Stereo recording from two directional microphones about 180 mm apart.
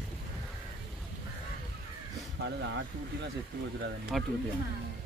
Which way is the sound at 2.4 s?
80° right.